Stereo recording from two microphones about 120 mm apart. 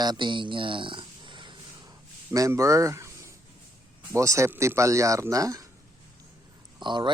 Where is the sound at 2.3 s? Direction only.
25° right (ahead or behind).